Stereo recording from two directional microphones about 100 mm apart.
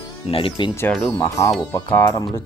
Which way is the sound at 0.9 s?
20° left (ahead or behind).